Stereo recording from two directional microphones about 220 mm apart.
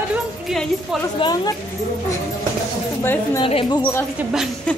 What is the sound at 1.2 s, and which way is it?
Speech, 15° left (ahead or behind).